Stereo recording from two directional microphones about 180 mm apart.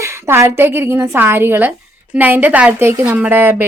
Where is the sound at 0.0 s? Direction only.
15° right (ahead or behind).